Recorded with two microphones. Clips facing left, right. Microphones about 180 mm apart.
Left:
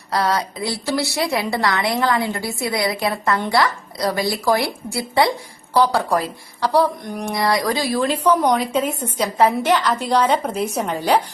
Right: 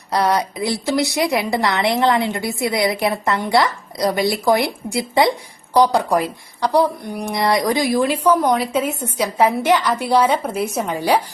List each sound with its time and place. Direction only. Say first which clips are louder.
0.1 s a woman's voice: right 2 dB; 20° right (ahead or behind)
7.3 s speech: right 2 dB; 20° right (ahead or behind)